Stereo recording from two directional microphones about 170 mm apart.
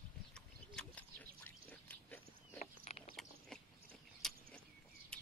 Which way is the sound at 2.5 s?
40° left (ahead or behind).